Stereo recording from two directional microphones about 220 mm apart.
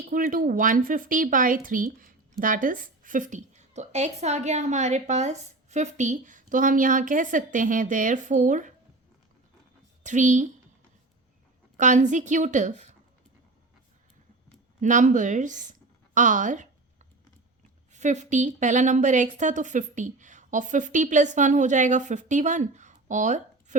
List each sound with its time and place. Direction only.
0.0 s a woman's voice: 40° right (ahead or behind)
10.0 s a woman's voice: 35° right (ahead or behind)
11.8 s a woman's voice: 35° right (ahead or behind)
14.8 s a woman's voice: 35° right (ahead or behind)
16.1 s a sound: 35° right (ahead or behind)
17.9 s a woman's voice: 35° right (ahead or behind)